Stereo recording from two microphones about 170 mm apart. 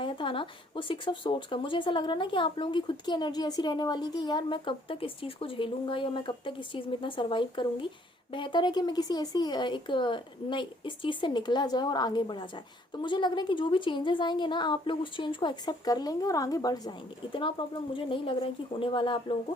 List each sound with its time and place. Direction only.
0.0 s speech: 30° left (ahead or behind)